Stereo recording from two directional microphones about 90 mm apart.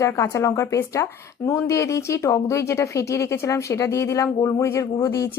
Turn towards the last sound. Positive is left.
turn(degrees=40)  # may be behind; listen again after turning